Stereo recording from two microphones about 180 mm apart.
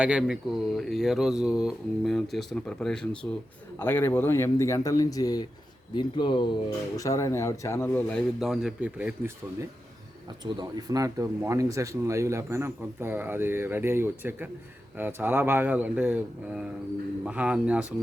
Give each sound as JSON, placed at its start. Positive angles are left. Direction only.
{"t": 0.0, "sound": "speech", "side_deg": -5}
{"t": 10.4, "sound": "speech", "side_deg": -20}